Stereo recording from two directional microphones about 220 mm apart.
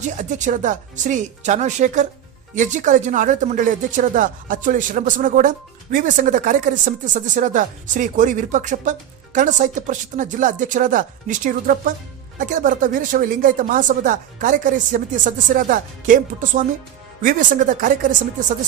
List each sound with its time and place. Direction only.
0.0 s speech: 35° right (ahead or behind)